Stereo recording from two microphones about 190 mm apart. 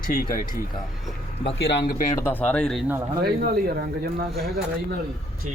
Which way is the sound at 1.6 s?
60° left (ahead or behind).